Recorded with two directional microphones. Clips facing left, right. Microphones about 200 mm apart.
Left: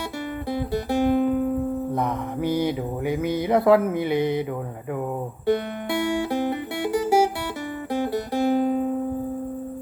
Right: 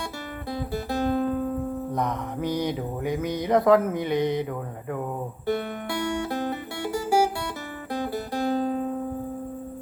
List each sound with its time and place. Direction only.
0.9 s music: 15° left (ahead or behind)
1.9 s mantra: 5° left (ahead or behind)
5.5 s music: 20° left (ahead or behind)